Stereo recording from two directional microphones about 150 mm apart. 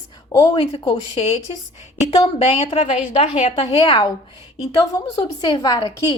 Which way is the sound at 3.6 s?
35° left (ahead or behind).